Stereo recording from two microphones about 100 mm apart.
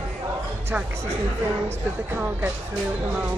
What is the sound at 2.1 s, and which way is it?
Speech, 20° right (ahead or behind).